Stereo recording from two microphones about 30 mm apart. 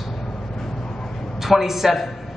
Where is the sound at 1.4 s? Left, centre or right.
Centre.